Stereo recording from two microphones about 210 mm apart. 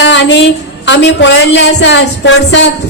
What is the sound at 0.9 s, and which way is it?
A woman's voice, 55° left (ahead or behind).